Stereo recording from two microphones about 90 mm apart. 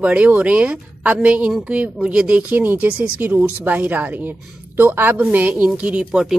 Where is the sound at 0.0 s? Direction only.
15° right (ahead or behind).